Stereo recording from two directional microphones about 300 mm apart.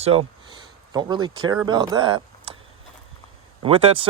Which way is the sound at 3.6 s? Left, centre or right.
Centre.